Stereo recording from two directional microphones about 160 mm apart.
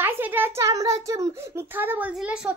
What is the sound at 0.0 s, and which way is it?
A child's voice, 10° right (ahead or behind).